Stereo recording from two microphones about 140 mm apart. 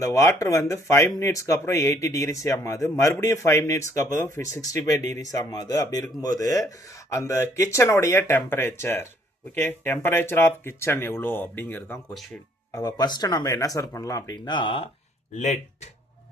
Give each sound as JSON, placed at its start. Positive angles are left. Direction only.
{"t": 0.0, "sound": "speech", "side_deg": 20}
{"t": 12.7, "sound": "speech", "side_deg": 30}